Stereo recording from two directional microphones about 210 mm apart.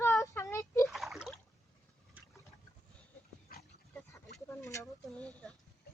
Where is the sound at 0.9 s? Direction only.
Centre (ahead or behind).